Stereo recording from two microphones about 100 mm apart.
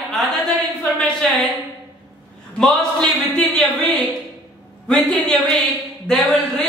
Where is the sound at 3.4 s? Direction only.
Centre (ahead or behind).